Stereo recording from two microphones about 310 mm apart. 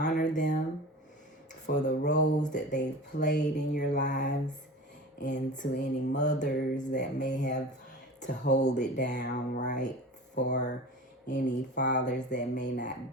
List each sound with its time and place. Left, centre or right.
0.0 s a sound: left
1.6 s speech: left
5.2 s mantra: left
8.4 s speech: left
11.3 s mantra: left